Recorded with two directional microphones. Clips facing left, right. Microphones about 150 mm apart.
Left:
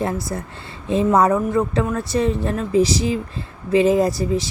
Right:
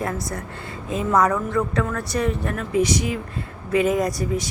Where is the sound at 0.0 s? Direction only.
30° left (ahead or behind).